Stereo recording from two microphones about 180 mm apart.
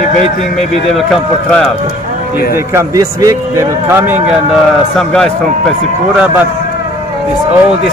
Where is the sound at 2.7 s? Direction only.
15° right (ahead or behind).